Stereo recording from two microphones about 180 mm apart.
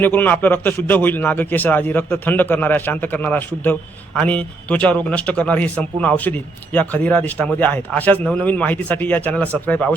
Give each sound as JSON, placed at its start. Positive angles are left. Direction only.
{"t": 0.0, "sound": "a man's voice", "side_deg": 10}